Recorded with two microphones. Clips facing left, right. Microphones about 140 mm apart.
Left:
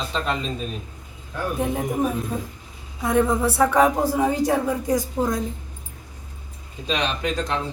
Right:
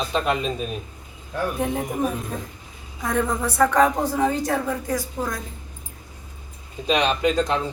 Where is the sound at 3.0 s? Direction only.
5° left (ahead or behind).